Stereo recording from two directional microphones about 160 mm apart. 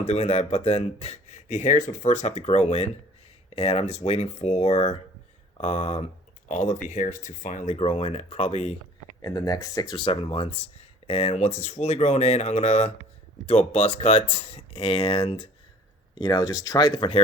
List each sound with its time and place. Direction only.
0.0 s speech: 40° left (ahead or behind)
9.2 s speech: 20° left (ahead or behind)
9.9 s speech: 35° left (ahead or behind)
16.1 s speech: 25° left (ahead or behind)